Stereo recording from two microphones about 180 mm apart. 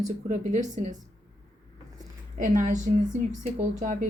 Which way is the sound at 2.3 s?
45° right (ahead or behind).